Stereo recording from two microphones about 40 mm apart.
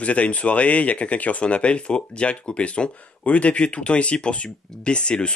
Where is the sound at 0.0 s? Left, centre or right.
Left.